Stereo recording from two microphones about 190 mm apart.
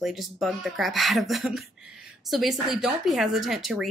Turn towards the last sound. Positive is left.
turn(degrees=0)  # may be behind; listen again after turning